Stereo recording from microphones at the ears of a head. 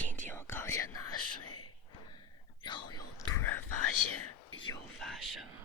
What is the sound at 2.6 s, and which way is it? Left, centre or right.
Whispering, left.